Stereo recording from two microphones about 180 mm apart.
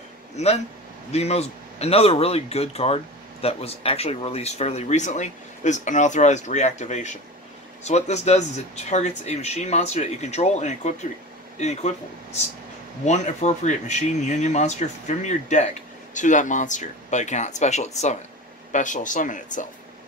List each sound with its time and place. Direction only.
0.4 s a man's voice: 40° left (ahead or behind)
13.0 s a man's voice: 40° left (ahead or behind)